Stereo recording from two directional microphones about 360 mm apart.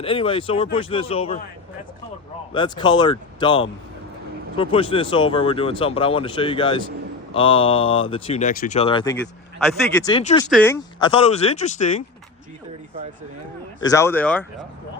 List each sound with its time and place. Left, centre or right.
0.0 s speech: centre
2.5 s speech: centre
13.8 s speech: centre